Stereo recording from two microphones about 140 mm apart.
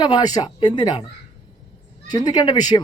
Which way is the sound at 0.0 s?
30° left (ahead or behind).